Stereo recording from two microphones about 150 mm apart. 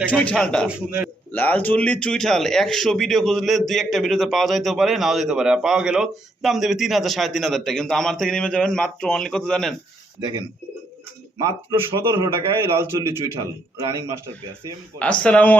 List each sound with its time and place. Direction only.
0.3 s speech: 5° left (ahead or behind)
0.7 s a man's voice: 10° right (ahead or behind)
1.3 s speech: 10° left (ahead or behind)
10.2 s a man's voice: 30° right (ahead or behind)
14.9 s speech: 10° left (ahead or behind)